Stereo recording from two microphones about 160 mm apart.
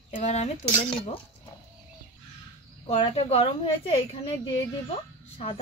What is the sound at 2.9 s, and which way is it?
Speech, 40° left (ahead or behind).